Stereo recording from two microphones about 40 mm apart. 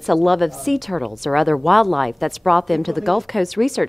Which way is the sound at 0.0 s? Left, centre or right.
Centre.